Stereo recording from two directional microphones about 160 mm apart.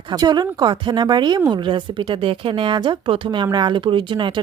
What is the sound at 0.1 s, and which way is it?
A woman's voice, 25° right (ahead or behind).